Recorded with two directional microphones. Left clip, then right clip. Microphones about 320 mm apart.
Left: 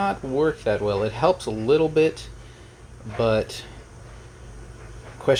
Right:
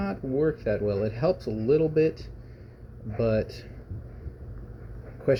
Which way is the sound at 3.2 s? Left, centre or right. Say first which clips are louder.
Left 5 dB; left.